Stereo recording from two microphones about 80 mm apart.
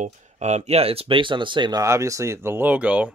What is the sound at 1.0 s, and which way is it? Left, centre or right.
Speech, right.